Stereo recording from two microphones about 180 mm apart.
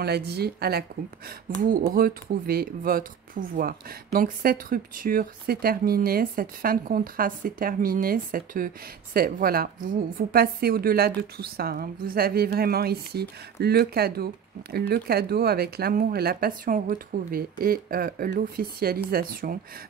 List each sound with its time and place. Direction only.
0.0 s speech: 65° right (ahead or behind)
1.6 s speech: 50° right (ahead or behind)